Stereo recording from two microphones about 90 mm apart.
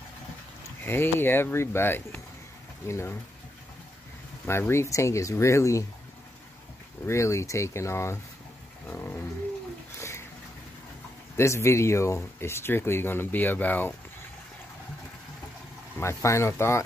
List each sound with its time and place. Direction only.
0.8 s speech: 25° left (ahead or behind)
4.5 s speech: 30° left (ahead or behind)
7.1 s speech: 35° left (ahead or behind)
8.9 s a sound: 25° left (ahead or behind)
11.3 s speech: 30° left (ahead or behind)
16.0 s speech: 35° left (ahead or behind)